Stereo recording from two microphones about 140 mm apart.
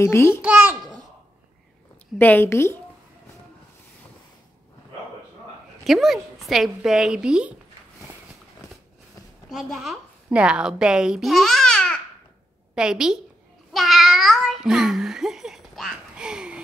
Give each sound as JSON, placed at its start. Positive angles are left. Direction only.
{"t": 0.0, "sound": "a woman's voice", "side_deg": 20}
{"t": 0.4, "sound": "a child's voice", "side_deg": -10}
{"t": 2.1, "sound": "a woman's voice", "side_deg": 15}
{"t": 5.9, "sound": "a woman's voice", "side_deg": 0}
{"t": 9.5, "sound": "a woman's voice", "side_deg": 0}
{"t": 13.7, "sound": "babbling", "side_deg": 0}